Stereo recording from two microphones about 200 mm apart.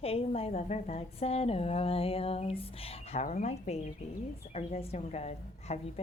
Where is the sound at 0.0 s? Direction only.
30° left (ahead or behind).